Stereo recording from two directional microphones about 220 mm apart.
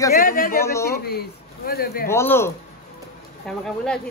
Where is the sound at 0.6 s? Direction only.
10° left (ahead or behind).